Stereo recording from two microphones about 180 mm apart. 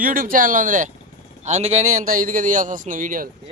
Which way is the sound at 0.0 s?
50° right (ahead or behind).